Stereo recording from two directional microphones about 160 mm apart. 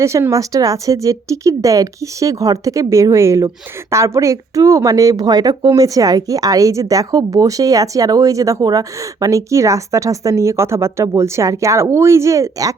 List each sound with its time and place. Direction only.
0.0 s speech: 20° right (ahead or behind)